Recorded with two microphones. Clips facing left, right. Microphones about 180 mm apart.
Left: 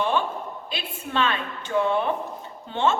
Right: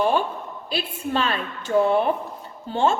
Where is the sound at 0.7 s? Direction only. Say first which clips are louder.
Right 7 dB; 35° right (ahead or behind).